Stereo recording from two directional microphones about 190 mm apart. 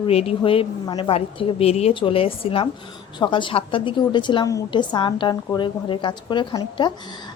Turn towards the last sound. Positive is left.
turn(degrees=25)  # may be behind; listen again after turning